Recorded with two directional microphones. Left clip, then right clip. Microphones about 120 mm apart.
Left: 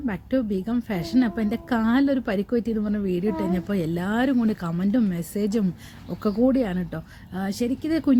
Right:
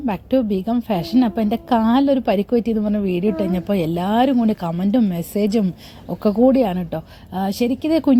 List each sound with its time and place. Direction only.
0.0 s a woman's voice: 20° right (ahead or behind)